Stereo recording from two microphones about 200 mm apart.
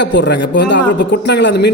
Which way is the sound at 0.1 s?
60° left (ahead or behind).